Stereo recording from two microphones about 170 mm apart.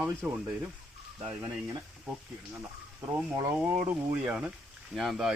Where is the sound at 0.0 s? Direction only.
10° right (ahead or behind).